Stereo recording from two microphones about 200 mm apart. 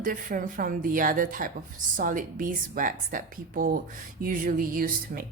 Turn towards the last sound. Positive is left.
turn(degrees=-45)  # may be behind; listen again after turning